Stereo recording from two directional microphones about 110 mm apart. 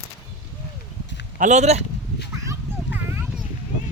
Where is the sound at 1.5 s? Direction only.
85° right.